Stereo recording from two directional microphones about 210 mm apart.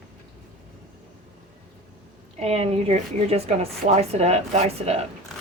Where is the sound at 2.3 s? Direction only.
30° right (ahead or behind).